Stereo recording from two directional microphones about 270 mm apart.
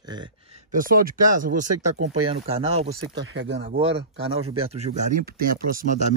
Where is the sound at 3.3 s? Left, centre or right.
Right.